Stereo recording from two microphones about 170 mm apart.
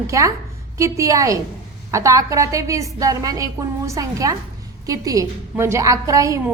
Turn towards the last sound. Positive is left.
turn(degrees=-20)  # may be behind; listen again after turning